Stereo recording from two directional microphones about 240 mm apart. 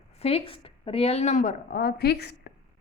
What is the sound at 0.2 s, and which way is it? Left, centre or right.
A woman's voice, left.